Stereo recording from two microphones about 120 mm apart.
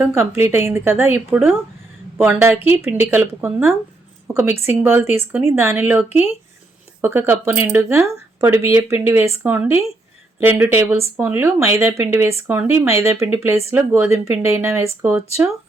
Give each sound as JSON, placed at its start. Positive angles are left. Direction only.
{"t": 0.0, "sound": "speech", "side_deg": -20}